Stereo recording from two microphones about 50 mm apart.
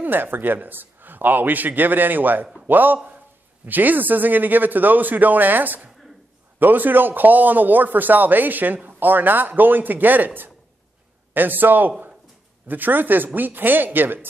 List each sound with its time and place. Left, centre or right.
0.0 s a man's voice: right